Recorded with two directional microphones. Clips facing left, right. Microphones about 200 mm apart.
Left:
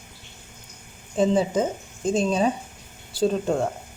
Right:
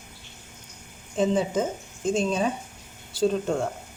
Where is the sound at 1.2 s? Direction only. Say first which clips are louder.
Left 3 dB; 35° left (ahead or behind).